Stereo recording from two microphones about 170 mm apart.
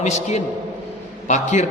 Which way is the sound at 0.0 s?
40° left (ahead or behind).